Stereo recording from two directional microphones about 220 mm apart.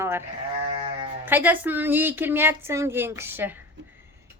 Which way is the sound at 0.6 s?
25° right (ahead or behind).